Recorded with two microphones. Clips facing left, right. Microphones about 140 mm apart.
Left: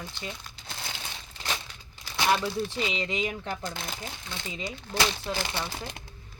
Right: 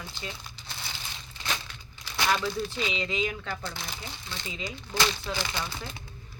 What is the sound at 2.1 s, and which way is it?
Crumpling, 20° left (ahead or behind).